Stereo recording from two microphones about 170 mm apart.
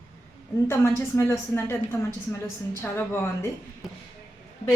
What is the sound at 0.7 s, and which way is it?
A woman's voice, 15° left (ahead or behind).